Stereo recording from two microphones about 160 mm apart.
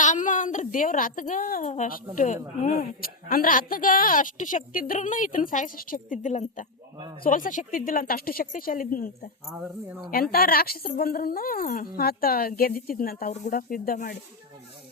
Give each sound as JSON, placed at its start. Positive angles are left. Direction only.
{"t": 0.0, "sound": "a woman's voice", "side_deg": 50}